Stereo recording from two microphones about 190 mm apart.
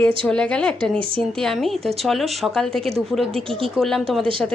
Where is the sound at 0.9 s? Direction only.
25° right (ahead or behind).